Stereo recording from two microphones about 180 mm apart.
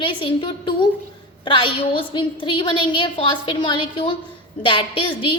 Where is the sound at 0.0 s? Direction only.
30° left (ahead or behind).